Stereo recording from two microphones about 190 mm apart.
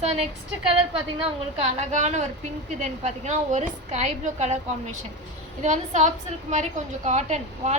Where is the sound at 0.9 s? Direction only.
30° right (ahead or behind).